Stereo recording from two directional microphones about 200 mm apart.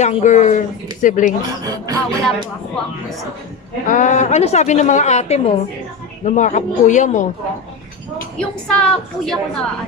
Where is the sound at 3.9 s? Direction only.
40° left (ahead or behind).